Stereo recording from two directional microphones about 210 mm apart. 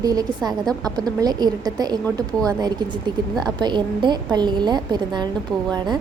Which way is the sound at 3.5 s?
20° right (ahead or behind).